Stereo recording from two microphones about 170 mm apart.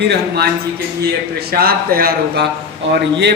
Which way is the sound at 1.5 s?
60° right (ahead or behind).